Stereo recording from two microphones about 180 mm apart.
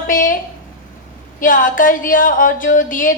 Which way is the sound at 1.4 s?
50° left (ahead or behind).